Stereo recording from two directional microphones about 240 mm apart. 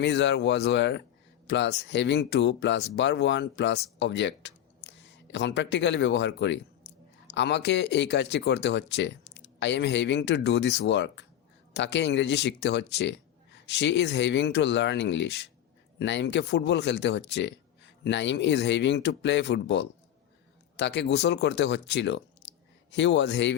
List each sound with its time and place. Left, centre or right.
0.0 s speech: left